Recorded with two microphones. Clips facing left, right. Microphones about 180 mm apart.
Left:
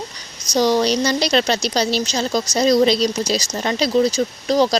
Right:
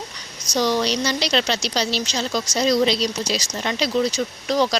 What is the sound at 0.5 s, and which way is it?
A woman's voice, 40° left (ahead or behind).